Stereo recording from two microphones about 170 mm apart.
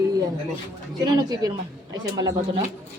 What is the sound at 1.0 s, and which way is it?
Speech, 20° right (ahead or behind).